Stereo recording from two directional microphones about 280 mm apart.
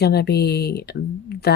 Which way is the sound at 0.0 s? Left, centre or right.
Left.